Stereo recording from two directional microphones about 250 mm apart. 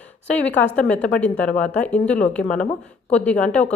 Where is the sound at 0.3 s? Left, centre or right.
Centre.